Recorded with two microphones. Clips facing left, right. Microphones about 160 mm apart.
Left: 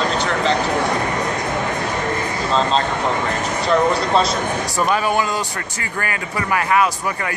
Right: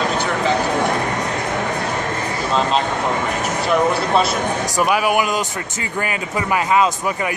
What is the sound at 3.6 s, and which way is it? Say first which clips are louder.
Speech: left 1 dB; 5° right (ahead or behind).